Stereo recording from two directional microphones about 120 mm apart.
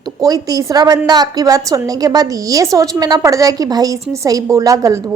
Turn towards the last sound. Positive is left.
turn(degrees=-25)  # may be behind; listen again after turning